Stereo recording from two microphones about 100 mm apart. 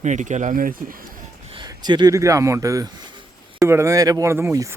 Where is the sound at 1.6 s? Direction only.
45° right (ahead or behind).